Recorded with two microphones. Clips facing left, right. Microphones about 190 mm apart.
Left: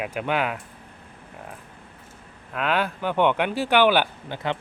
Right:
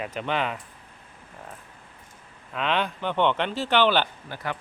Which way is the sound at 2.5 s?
5° left (ahead or behind).